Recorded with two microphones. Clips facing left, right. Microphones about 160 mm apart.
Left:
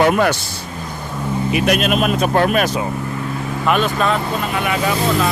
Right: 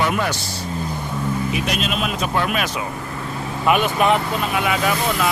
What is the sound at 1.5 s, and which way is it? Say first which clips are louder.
Speech: left 7 dB; 60° left (ahead or behind).